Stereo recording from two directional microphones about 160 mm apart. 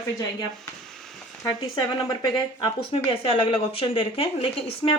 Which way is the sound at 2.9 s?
35° left (ahead or behind).